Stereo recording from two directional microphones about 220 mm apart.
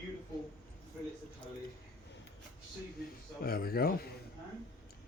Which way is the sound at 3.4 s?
45° left (ahead or behind).